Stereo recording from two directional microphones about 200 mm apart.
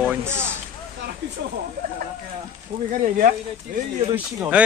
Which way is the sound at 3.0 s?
40° right (ahead or behind).